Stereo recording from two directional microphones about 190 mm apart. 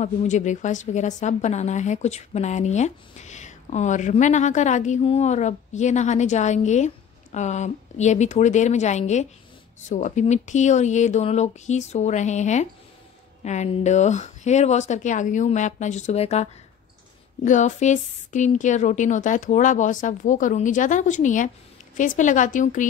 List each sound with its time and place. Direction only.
0.0 s speech: 40° left (ahead or behind)
17.5 s speech: 40° left (ahead or behind)